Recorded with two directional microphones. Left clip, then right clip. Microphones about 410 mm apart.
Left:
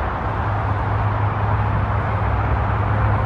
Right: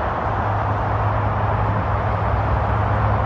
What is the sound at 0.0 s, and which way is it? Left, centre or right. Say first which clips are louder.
Vehicle: right 2 dB; right.